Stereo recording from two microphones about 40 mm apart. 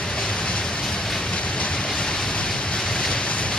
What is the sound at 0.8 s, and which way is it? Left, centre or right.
Train, centre.